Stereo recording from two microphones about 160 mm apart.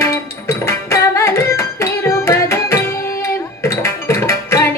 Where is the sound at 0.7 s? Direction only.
15° left (ahead or behind).